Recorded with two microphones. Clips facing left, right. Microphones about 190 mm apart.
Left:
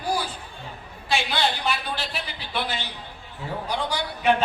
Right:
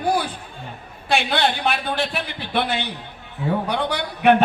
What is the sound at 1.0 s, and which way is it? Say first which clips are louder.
A man's voice: right 4 dB; 60° right (ahead or behind).